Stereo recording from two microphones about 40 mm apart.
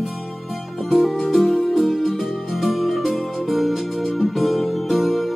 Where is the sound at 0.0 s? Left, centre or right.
Centre.